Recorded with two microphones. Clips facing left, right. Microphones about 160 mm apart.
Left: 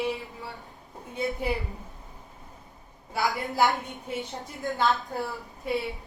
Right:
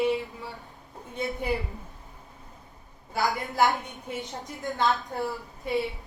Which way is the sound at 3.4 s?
Centre (ahead or behind).